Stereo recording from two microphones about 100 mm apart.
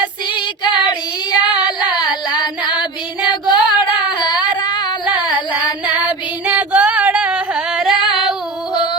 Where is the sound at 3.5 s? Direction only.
50° left (ahead or behind).